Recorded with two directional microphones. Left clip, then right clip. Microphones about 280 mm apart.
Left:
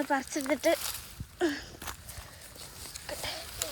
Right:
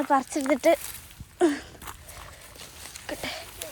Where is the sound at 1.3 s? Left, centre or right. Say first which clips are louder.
Right 7 dB; centre.